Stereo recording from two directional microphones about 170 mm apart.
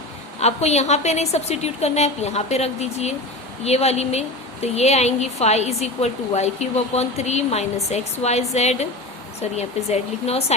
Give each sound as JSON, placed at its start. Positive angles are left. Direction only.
{"t": 0.3, "sound": "a woman's voice", "side_deg": 40}